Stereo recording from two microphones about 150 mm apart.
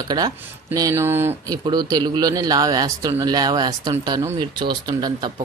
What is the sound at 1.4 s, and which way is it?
Speech, 25° right (ahead or behind).